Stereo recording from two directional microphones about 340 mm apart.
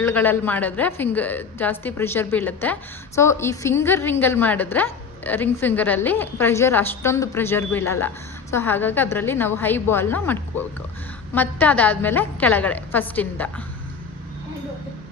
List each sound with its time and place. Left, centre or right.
0.0 s a woman's voice: centre